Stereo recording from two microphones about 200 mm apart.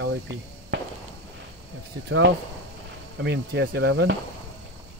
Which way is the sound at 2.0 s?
65° right (ahead or behind).